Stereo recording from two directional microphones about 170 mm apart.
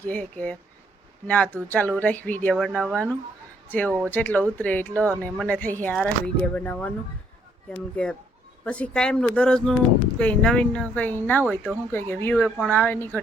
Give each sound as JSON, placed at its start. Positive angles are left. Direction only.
{"t": 0.0, "sound": "speech", "side_deg": 10}